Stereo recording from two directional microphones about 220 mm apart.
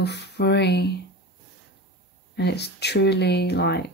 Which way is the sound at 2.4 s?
50° left (ahead or behind).